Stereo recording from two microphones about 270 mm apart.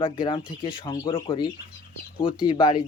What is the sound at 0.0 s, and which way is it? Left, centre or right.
A man's voice, centre.